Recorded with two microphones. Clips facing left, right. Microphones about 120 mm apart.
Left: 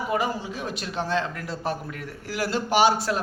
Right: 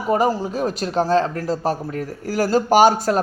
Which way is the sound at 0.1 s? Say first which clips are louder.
Right 10 dB; 40° right (ahead or behind).